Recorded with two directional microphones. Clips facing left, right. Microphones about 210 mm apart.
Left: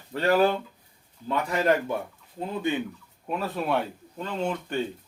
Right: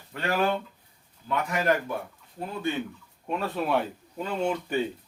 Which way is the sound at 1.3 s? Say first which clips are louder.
Left 2 dB; 30° left (ahead or behind).